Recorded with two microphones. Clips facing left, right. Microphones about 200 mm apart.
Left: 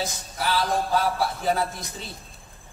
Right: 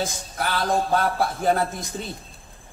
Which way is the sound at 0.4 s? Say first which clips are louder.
Right 1 dB; 55° right (ahead or behind).